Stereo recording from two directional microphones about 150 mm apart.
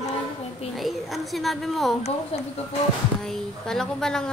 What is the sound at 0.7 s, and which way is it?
A woman's voice, centre (ahead or behind).